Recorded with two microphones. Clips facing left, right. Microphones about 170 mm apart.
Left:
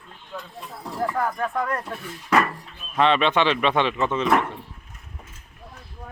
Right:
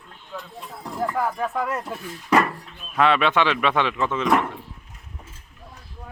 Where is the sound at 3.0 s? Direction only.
5° right (ahead or behind).